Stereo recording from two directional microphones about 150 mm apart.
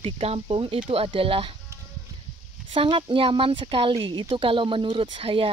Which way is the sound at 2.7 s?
35° right (ahead or behind).